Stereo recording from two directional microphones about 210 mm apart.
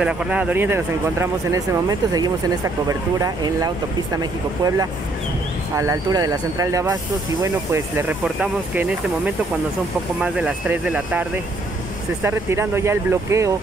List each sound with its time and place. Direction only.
0.0 s speech: 5° right (ahead or behind)